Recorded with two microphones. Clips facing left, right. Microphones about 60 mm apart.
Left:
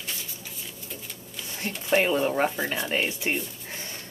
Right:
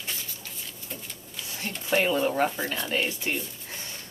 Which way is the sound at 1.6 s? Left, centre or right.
Centre.